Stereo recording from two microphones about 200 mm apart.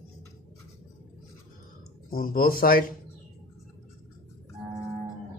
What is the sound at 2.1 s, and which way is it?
Speech, 45° left (ahead or behind).